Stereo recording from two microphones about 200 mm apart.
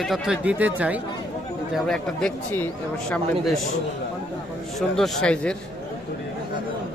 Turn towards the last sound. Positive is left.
turn(degrees=5)  # may be behind; listen again after turning